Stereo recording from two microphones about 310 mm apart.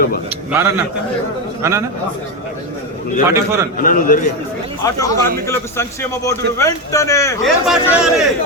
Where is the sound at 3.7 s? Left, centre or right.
Left.